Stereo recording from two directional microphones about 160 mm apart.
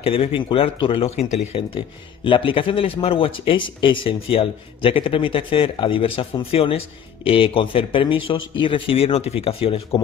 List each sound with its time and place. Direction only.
0.0 s speech: 35° left (ahead or behind)
2.2 s speech: 35° left (ahead or behind)